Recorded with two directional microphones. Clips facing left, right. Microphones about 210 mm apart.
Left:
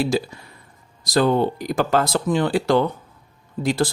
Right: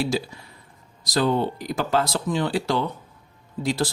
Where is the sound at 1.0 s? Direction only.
50° left (ahead or behind).